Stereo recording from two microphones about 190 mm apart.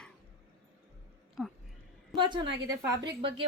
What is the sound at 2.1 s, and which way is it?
A woman's voice, 25° right (ahead or behind).